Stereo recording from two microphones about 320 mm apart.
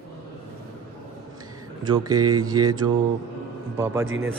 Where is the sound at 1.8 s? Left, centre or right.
Centre.